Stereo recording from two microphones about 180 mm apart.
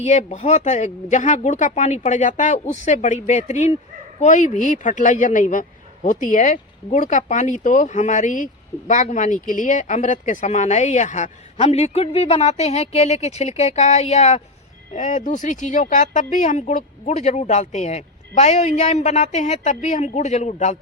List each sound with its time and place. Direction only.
0.0 s speech: 40° left (ahead or behind)